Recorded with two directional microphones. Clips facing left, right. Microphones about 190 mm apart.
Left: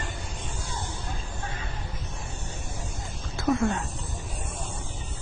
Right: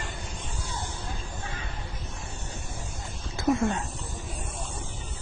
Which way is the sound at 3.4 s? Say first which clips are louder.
Even; 20° right (ahead or behind).